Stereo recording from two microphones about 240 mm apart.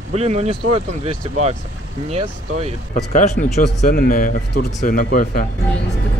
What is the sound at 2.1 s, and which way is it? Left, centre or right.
Speech, right.